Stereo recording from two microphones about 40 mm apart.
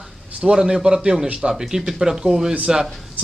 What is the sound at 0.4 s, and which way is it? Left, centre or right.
Speech, centre.